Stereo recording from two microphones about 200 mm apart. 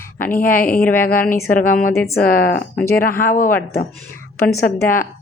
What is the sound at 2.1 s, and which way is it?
Speech, 10° left (ahead or behind).